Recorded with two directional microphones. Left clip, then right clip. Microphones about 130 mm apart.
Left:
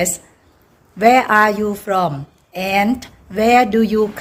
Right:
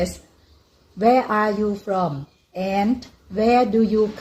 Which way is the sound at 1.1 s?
10° right (ahead or behind).